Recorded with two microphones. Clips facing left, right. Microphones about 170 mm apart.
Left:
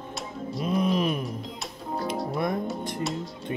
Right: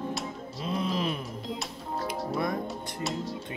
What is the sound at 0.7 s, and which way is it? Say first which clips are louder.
Music: left 5 dB; 25° right (ahead or behind).